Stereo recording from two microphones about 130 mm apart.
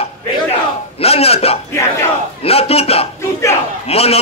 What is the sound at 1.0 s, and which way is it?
A man's voice, 50° left (ahead or behind).